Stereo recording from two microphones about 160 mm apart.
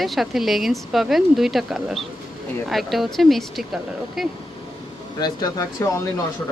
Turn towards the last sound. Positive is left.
turn(degrees=20)  # may be behind; listen again after turning